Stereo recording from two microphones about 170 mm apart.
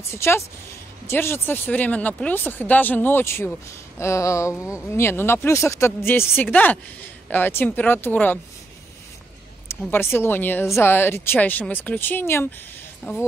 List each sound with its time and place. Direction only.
0.1 s speech: 15° left (ahead or behind)
4.6 s speech: 5° right (ahead or behind)
4.9 s speech: 15° left (ahead or behind)
9.8 s speech: 15° left (ahead or behind)